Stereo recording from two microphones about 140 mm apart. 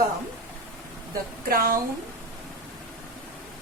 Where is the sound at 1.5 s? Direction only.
90° right.